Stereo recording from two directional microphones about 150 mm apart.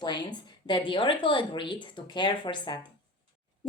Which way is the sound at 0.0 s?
30° left (ahead or behind).